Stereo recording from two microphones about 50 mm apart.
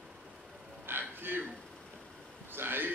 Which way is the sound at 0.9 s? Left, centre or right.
Right.